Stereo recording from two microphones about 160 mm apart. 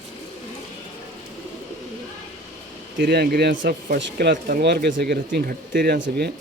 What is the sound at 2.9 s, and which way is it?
A man's voice, 75° right (ahead or behind).